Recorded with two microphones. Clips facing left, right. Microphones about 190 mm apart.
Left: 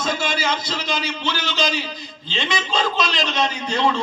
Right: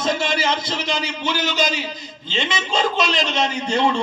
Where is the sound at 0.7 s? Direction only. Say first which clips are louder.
Right 1 dB; 20° right (ahead or behind).